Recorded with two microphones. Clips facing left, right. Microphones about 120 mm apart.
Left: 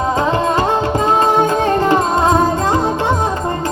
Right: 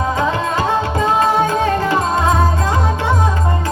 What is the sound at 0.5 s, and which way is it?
Music, 40° left (ahead or behind).